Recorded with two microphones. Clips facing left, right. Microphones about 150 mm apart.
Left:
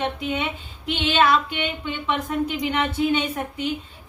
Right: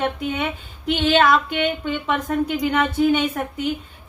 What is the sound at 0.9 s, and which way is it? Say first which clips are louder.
Speech: right 2 dB; 45° right (ahead or behind).